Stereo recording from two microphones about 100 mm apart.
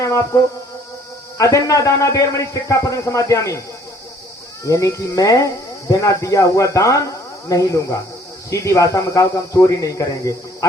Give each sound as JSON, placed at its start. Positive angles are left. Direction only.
{"t": 1.4, "sound": "speech", "side_deg": 35}
{"t": 4.6, "sound": "speech", "side_deg": 35}